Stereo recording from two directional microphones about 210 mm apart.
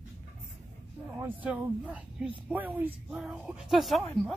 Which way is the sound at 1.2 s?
5° right (ahead or behind).